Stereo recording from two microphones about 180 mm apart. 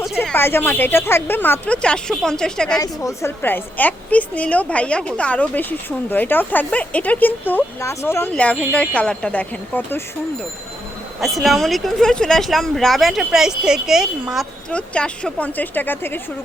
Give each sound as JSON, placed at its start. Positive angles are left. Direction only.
{"t": 0.2, "sound": "a woman's voice", "side_deg": 10}
{"t": 2.7, "sound": "a woman's voice", "side_deg": 20}
{"t": 11.2, "sound": "speech", "side_deg": 0}